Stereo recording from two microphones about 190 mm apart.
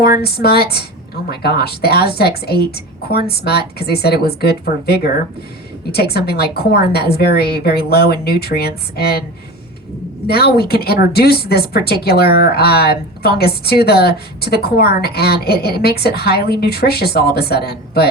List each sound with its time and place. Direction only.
0.0 s a woman's voice: 55° left (ahead or behind)
10.2 s a woman's voice: 55° left (ahead or behind)